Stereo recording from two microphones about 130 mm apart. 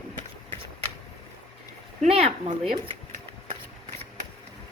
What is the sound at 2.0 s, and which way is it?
Speech, 50° right (ahead or behind).